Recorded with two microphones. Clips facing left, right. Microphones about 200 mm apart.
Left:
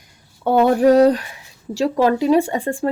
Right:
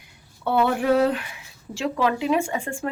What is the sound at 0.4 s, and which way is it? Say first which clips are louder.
A woman's voice: left 7 dB; 40° left (ahead or behind).